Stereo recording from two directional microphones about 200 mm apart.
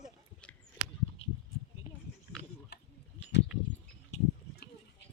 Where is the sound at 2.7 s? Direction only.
55° left (ahead or behind).